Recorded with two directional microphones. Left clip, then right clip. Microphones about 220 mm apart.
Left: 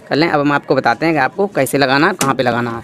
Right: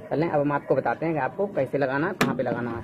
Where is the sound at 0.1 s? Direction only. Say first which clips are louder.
Left 10 dB; 60° left (ahead or behind).